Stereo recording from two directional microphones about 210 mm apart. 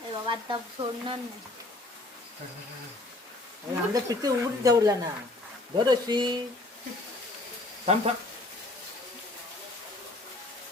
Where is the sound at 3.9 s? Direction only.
15° right (ahead or behind).